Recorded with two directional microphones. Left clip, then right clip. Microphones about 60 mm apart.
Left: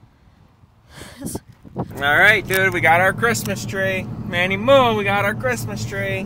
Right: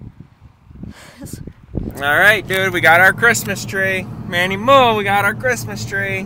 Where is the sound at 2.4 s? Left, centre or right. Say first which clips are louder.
Right 3 dB; right.